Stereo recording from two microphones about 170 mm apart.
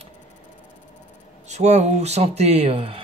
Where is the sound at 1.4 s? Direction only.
40° right (ahead or behind).